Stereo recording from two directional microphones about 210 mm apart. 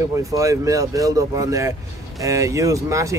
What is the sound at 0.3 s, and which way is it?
Speech, 15° right (ahead or behind).